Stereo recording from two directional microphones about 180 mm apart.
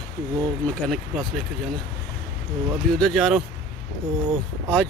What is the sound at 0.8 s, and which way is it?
Speech, centre (ahead or behind).